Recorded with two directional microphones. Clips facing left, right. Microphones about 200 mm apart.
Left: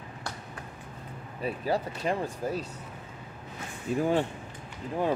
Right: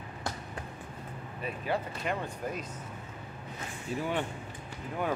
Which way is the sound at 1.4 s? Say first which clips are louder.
Left 4 dB; 35° left (ahead or behind).